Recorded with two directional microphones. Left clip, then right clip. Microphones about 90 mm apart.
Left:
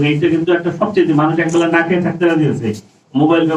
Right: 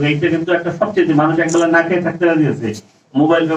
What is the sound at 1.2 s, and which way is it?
A man's voice, 35° right (ahead or behind).